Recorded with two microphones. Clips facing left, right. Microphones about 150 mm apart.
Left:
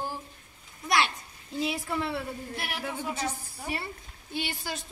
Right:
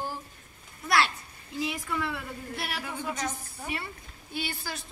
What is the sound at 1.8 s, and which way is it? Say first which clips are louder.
Speech: left 2 dB; 30° left (ahead or behind).